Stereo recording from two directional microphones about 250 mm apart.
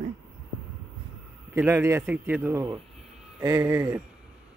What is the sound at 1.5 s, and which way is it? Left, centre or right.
A man's voice, centre.